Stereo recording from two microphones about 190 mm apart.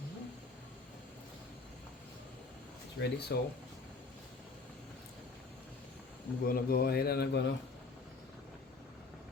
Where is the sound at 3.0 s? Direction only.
60° left (ahead or behind).